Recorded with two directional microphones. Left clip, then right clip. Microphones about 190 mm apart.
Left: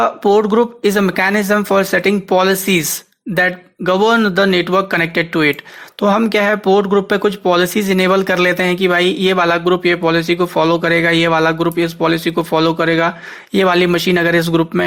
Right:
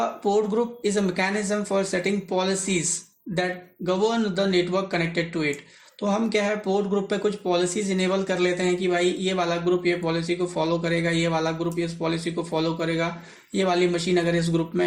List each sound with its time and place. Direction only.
0.3 s speech: 25° left (ahead or behind)